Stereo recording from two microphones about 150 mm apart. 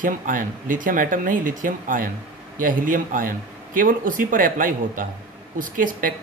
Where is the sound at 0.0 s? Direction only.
65° right (ahead or behind).